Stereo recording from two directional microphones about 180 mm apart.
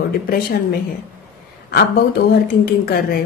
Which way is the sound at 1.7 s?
55° left (ahead or behind).